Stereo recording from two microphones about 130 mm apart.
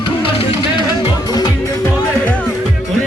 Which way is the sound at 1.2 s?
30° left (ahead or behind).